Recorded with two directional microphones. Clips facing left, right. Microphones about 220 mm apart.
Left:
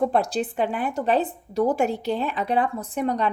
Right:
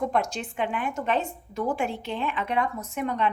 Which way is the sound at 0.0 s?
35° left (ahead or behind).